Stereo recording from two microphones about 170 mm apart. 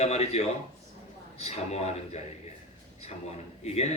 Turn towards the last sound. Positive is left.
turn(degrees=40)  # may be behind; listen again after turning